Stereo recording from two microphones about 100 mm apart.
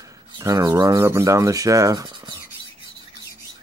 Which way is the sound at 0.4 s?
35° right (ahead or behind).